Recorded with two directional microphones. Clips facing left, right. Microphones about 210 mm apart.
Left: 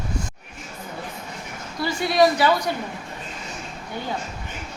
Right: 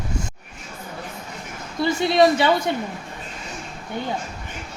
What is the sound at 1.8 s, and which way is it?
Speech, 25° right (ahead or behind).